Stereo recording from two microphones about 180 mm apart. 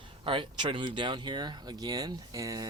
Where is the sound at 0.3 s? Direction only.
25° right (ahead or behind).